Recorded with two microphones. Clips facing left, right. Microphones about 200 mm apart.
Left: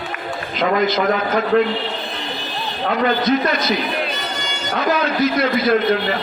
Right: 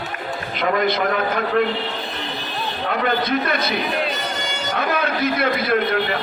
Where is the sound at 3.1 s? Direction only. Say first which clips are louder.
Left 3 dB; 55° right (ahead or behind).